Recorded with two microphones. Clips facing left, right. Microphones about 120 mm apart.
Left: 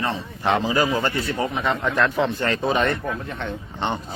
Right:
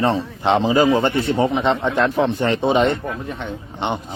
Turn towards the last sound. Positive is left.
turn(degrees=-15)  # may be behind; listen again after turning